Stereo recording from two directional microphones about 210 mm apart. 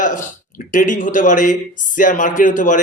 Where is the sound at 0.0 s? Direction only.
40° left (ahead or behind).